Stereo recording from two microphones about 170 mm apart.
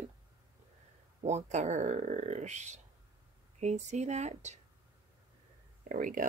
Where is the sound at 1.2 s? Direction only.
40° right (ahead or behind).